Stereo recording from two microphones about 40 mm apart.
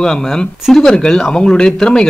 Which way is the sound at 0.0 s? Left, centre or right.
Centre.